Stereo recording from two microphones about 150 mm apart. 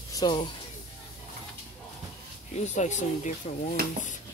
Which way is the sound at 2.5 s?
50° left (ahead or behind).